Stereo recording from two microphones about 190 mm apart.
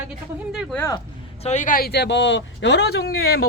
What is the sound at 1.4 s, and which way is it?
Speech, 40° left (ahead or behind).